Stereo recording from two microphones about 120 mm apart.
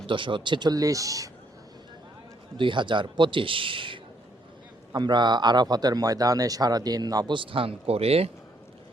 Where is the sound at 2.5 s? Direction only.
45° right (ahead or behind).